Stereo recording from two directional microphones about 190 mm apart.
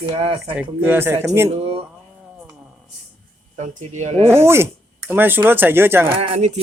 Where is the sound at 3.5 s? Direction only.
35° right (ahead or behind).